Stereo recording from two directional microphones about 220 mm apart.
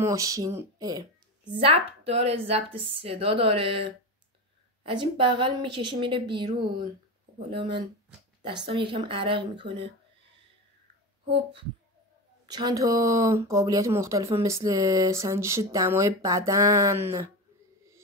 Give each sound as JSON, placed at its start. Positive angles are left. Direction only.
{"t": 0.0, "sound": "speech", "side_deg": -15}
{"t": 1.6, "sound": "a woman's voice", "side_deg": -25}
{"t": 11.2, "sound": "a woman's voice", "side_deg": -25}